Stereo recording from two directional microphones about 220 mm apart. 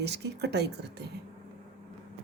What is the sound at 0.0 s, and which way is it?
Speech, 50° right (ahead or behind).